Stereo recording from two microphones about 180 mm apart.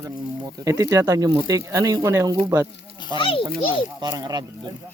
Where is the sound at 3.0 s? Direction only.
25° left (ahead or behind).